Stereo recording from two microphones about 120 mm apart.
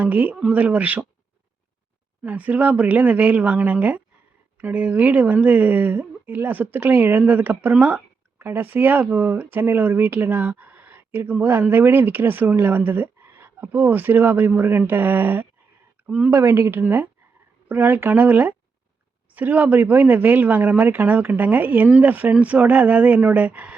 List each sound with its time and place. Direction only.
0.0 s speech: 15° right (ahead or behind)
2.2 s speech: 15° right (ahead or behind)
16.3 s speech: 20° right (ahead or behind)